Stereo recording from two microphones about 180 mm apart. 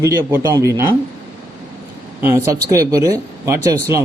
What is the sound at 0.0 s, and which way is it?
Speech, 10° right (ahead or behind).